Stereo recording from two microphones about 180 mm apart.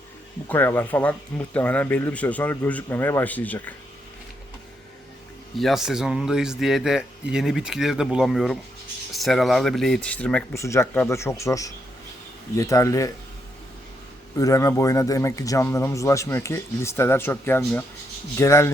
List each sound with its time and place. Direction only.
0.4 s speech: 10° left (ahead or behind)
5.5 s a man's voice: centre (ahead or behind); by 13.1 s 20° left (ahead or behind)
14.3 s speech: 20° left (ahead or behind)